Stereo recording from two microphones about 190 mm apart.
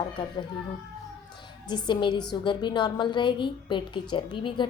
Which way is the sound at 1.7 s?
25° left (ahead or behind).